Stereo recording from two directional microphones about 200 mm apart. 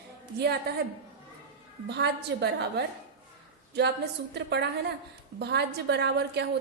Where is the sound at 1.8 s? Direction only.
55° right (ahead or behind).